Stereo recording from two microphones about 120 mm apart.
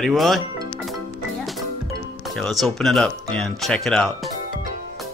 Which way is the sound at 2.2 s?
Centre (ahead or behind).